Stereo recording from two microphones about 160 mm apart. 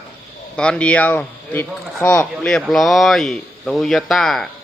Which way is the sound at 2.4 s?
Centre (ahead or behind).